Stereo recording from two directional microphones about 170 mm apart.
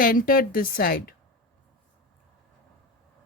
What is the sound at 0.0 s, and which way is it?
Speech, 55° left (ahead or behind).